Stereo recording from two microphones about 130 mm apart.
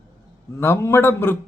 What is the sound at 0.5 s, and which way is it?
Speech, 20° left (ahead or behind).